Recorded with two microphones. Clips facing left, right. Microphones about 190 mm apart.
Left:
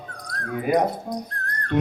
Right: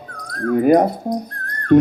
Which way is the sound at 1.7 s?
50° right (ahead or behind).